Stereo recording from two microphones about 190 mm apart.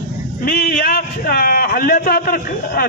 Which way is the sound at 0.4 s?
55° left (ahead or behind).